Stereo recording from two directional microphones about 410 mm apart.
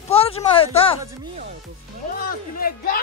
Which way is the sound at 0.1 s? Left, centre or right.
Centre.